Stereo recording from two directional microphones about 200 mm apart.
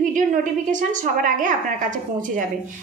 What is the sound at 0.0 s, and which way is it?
A woman's voice, 40° right (ahead or behind).